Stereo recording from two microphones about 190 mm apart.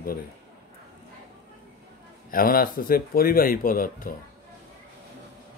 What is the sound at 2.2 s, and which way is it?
Speech, 50° left (ahead or behind).